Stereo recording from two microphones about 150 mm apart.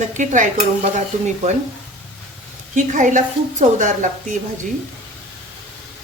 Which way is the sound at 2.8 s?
60° right (ahead or behind).